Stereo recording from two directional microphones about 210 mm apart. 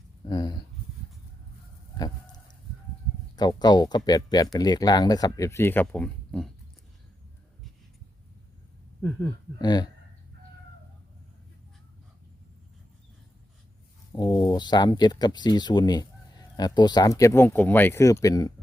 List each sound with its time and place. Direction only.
0.3 s speech: 20° left (ahead or behind)
2.0 s a sound: 20° left (ahead or behind)
3.3 s speech: 20° left (ahead or behind); by 6.5 s 5° left (ahead or behind)
9.0 s speech: 10° left (ahead or behind)
9.6 s speech: 20° left (ahead or behind)
14.1 s speech: 20° left (ahead or behind)